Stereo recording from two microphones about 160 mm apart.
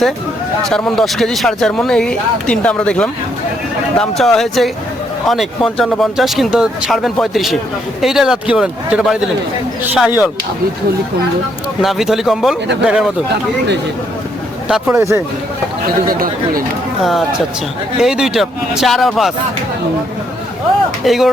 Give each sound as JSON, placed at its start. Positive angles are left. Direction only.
{"t": 0.7, "sound": "speech", "side_deg": 5}
{"t": 11.8, "sound": "speech", "side_deg": 0}
{"t": 14.9, "sound": "speech", "side_deg": -15}
{"t": 16.0, "sound": "speech", "side_deg": -65}
{"t": 17.0, "sound": "speech", "side_deg": 0}
{"t": 21.0, "sound": "speech", "side_deg": 0}